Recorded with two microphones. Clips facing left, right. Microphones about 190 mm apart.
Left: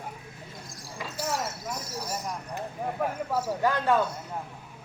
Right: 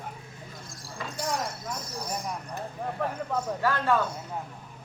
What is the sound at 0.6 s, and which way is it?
Speech, centre (ahead or behind).